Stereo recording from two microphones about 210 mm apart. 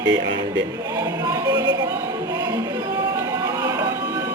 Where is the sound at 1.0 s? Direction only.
15° right (ahead or behind).